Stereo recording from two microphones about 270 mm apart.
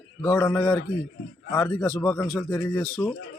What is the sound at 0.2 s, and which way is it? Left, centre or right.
Speech, centre.